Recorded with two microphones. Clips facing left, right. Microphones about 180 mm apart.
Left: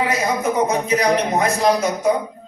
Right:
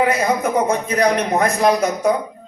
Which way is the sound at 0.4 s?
55° right (ahead or behind).